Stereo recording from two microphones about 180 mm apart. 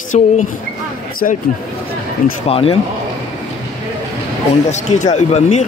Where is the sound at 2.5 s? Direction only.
30° left (ahead or behind).